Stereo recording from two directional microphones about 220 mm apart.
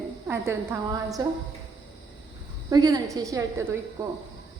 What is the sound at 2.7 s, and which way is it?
Speech, 15° right (ahead or behind).